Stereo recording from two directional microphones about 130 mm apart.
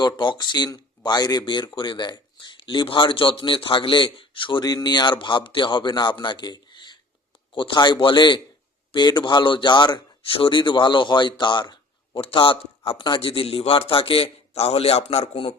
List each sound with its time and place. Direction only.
0.0 s speech: 35° left (ahead or behind)